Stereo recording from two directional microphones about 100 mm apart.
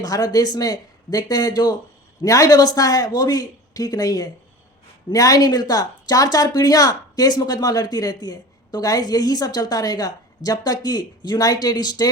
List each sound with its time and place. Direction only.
0.0 s speech: 40° left (ahead or behind)